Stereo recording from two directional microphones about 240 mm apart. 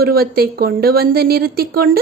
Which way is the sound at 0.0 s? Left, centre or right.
Right.